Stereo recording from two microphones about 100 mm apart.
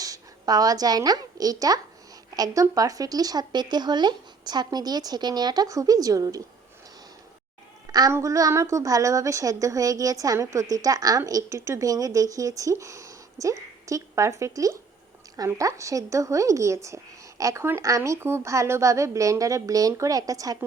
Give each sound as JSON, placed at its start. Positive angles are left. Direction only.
{"t": 0.0, "sound": "a woman's voice", "side_deg": -40}
{"t": 8.1, "sound": "speech", "side_deg": -35}